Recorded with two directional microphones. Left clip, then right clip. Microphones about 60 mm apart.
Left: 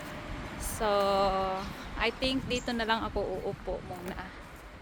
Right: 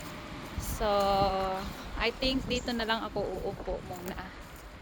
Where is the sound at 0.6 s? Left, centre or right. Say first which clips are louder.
Even; centre.